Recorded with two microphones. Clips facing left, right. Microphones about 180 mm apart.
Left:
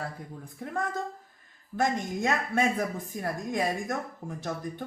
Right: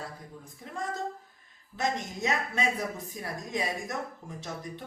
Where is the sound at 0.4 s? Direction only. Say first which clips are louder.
Left 4 dB; 55° left (ahead or behind).